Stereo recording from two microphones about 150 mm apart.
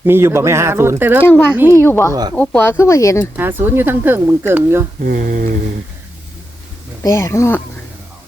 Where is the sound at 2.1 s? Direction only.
25° right (ahead or behind).